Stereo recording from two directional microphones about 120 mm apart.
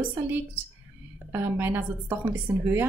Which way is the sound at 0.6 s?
15° right (ahead or behind).